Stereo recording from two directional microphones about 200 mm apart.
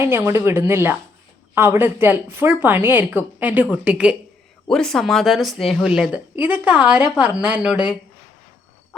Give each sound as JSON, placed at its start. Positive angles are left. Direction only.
{"t": 0.0, "sound": "a woman's voice", "side_deg": -10}